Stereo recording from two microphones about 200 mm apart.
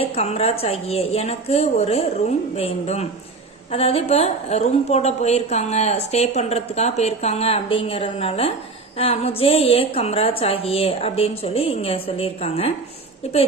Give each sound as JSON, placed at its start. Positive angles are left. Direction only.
{"t": 0.1, "sound": "a woman's voice", "side_deg": 30}